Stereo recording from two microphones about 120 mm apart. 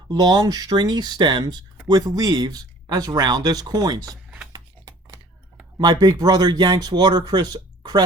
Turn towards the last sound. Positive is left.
turn(degrees=-35)  # may be behind; listen again after turning